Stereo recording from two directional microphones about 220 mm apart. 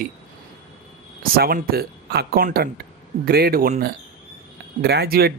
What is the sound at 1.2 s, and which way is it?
Speech, 40° right (ahead or behind).